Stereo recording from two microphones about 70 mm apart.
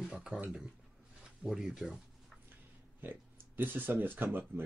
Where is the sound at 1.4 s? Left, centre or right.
Centre.